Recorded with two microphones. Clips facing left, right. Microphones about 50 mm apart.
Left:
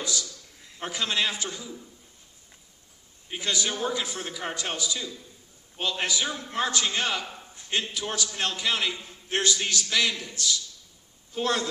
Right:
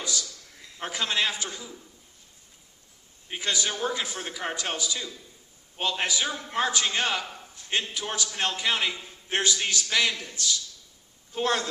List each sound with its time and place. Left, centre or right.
0.7 s a man's voice: centre
3.3 s a man's voice: centre
4.2 s a man's voice: centre
4.6 s a man's voice: right